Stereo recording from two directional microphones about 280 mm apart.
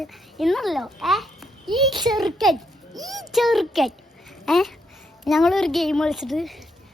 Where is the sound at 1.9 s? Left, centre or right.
Centre.